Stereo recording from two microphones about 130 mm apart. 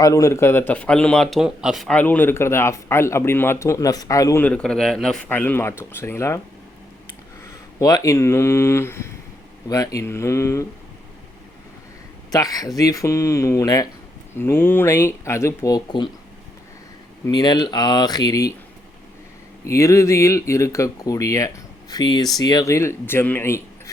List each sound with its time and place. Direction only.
0.0 s speech: 25° left (ahead or behind); by 1.9 s 5° right (ahead or behind)
1.9 s speech: 15° left (ahead or behind)
4.4 s speech: 5° left (ahead or behind)
7.8 s speech: 30° left (ahead or behind)
12.3 s speech: 30° left (ahead or behind)
17.2 s speech: 30° left (ahead or behind)
19.6 s speech: 25° left (ahead or behind)